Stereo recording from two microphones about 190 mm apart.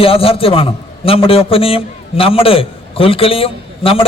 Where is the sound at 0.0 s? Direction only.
30° left (ahead or behind).